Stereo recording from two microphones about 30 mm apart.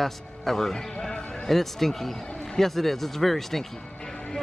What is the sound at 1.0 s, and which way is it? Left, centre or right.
Basketball bounce, left.